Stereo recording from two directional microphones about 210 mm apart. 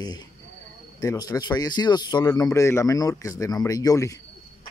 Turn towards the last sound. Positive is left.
turn(degrees=15)  # may be behind; listen again after turning